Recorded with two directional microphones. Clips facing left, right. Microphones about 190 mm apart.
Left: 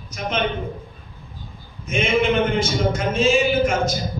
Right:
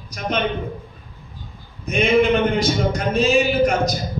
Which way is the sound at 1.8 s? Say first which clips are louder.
Right 3 dB; 35° right (ahead or behind).